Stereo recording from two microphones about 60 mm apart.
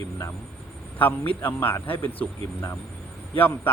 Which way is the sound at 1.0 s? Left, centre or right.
Left.